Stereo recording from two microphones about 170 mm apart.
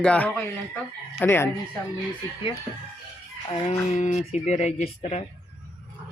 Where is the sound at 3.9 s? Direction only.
45° left (ahead or behind).